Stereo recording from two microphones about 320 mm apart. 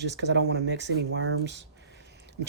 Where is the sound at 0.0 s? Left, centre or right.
Right.